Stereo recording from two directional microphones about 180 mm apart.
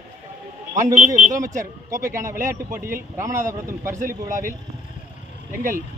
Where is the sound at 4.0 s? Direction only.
45° right (ahead or behind).